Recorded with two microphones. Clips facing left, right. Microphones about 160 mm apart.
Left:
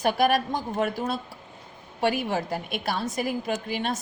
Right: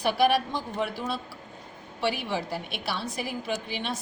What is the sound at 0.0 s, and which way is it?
A woman's voice, 45° left (ahead or behind).